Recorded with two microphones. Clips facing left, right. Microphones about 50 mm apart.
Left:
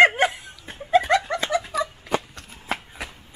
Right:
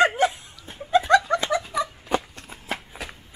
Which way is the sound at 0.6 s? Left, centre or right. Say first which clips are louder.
Left 2 dB; left.